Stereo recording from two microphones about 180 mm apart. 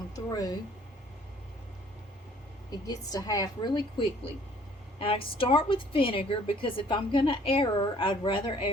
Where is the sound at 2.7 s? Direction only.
20° left (ahead or behind).